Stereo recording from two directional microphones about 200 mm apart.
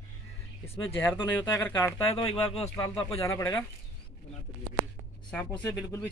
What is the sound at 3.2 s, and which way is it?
Speech, 15° left (ahead or behind).